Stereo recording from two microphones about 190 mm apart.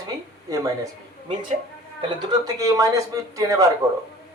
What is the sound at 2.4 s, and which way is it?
Speech, 15° right (ahead or behind).